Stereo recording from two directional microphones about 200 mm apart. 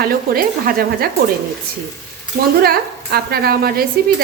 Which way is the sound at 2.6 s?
50° right (ahead or behind).